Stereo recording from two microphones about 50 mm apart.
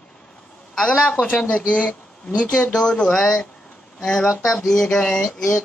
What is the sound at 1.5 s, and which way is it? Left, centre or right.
Speech, left.